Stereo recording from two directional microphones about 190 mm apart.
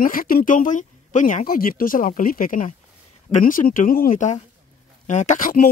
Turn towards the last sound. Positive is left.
turn(degrees=45)  # may be behind; listen again after turning